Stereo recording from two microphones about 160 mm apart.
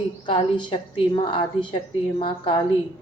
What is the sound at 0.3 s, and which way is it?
A woman's voice, 30° left (ahead or behind).